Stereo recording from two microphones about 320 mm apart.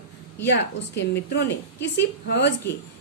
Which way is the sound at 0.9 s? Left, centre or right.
Left.